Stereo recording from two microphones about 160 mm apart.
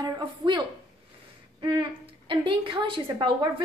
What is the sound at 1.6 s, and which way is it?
A woman's voice, 30° right (ahead or behind).